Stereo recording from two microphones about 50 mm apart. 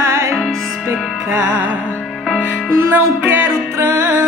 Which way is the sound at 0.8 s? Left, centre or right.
Right.